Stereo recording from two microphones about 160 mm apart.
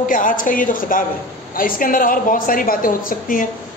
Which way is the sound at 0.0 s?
55° left (ahead or behind).